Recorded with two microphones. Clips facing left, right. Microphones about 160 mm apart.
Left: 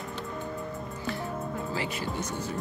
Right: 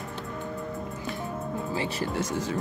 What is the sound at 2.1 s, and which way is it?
Speech, 90° right.